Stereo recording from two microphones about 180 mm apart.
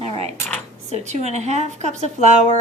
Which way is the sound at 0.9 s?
40° right (ahead or behind).